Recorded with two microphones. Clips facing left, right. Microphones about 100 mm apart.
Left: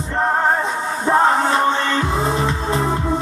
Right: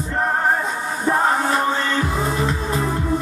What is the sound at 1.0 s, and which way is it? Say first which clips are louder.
Music: left 3 dB; 25° left (ahead or behind).